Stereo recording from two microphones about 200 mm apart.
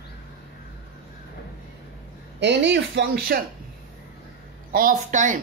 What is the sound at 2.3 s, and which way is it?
Speech, 60° right (ahead or behind).